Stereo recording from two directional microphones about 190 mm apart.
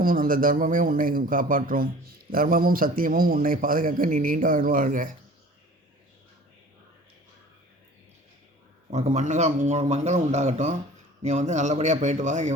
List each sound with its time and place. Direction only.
0.0 s a man's voice: 50° right (ahead or behind)
8.9 s a man's voice: 40° right (ahead or behind)